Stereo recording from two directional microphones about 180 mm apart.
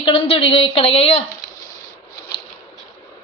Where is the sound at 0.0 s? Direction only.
30° left (ahead or behind).